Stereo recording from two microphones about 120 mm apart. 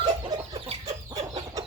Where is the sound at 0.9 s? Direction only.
70° right (ahead or behind).